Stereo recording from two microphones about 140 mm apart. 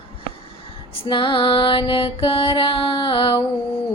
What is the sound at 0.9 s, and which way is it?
Music, 35° left (ahead or behind).